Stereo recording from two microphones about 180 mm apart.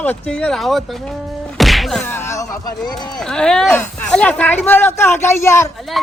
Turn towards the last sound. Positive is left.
turn(degrees=15)  # may be behind; listen again after turning